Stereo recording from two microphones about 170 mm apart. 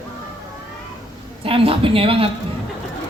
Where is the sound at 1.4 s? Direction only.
35° right (ahead or behind).